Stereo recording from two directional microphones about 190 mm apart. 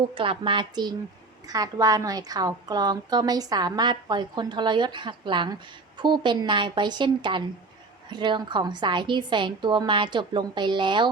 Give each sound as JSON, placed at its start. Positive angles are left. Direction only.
{"t": 0.1, "sound": "a woman's voice", "side_deg": -25}